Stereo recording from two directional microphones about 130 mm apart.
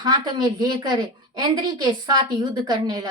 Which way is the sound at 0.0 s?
35° right (ahead or behind).